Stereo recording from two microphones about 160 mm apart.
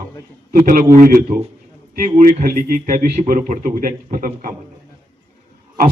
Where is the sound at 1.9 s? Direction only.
60° right (ahead or behind).